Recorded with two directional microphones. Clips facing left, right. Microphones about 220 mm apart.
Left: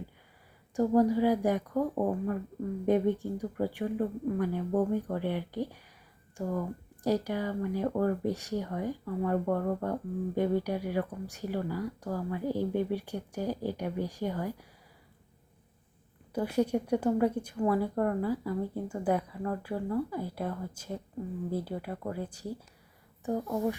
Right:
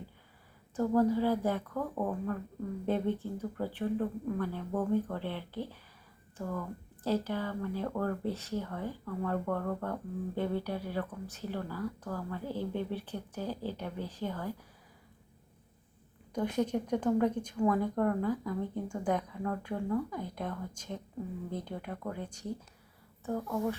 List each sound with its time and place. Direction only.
0.8 s speech: 15° left (ahead or behind)
16.3 s speech: 5° left (ahead or behind)